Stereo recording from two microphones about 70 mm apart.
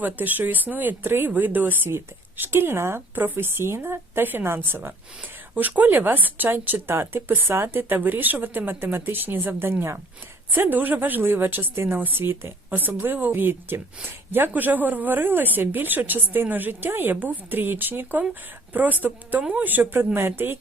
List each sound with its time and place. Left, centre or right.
0.0 s a woman's voice: right